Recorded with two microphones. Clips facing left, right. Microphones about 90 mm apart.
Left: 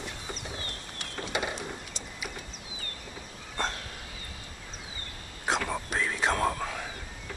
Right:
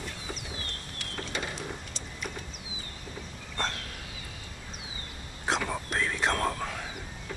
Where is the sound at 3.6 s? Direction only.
Centre (ahead or behind).